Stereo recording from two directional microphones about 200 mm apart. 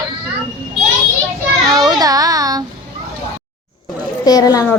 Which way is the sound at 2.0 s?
20° right (ahead or behind).